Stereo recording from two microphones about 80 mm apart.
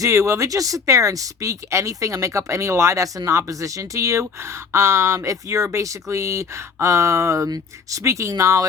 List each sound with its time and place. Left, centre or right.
0.0 s speech: right